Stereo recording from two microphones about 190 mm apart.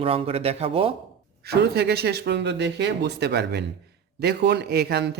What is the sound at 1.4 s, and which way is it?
Speech, 55° right (ahead or behind).